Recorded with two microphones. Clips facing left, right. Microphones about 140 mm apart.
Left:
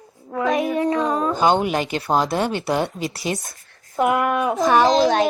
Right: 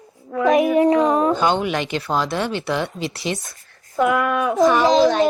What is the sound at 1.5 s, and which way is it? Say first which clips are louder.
Speech: left 1 dB; 40° left (ahead or behind).